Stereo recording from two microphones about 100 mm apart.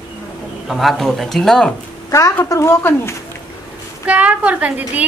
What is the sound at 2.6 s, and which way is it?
Speech, 25° left (ahead or behind).